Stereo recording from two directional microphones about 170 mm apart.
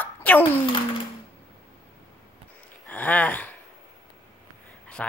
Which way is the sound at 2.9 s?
10° left (ahead or behind).